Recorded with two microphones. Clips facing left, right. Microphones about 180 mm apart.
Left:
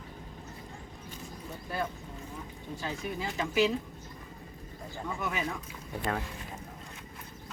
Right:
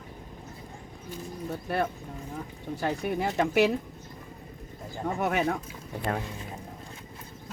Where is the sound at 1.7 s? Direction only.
70° right (ahead or behind).